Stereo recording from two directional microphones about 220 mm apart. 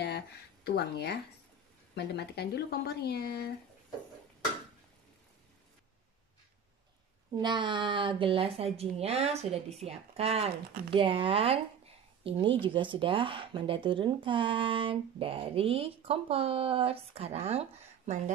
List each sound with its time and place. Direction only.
0.0 s speech: 50° left (ahead or behind)
7.3 s a woman's voice: 20° right (ahead or behind)